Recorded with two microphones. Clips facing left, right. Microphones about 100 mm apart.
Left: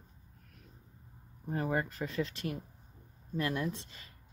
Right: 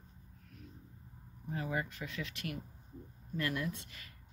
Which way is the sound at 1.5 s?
45° left (ahead or behind).